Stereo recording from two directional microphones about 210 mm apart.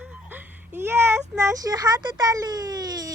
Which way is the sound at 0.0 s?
10° right (ahead or behind).